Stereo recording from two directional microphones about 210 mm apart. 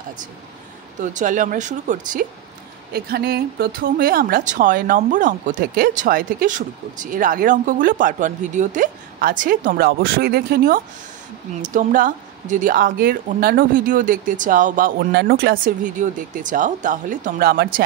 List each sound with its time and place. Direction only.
1.1 s a woman's voice: 40° right (ahead or behind)